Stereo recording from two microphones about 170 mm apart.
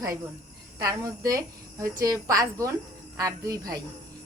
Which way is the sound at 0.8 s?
20° right (ahead or behind).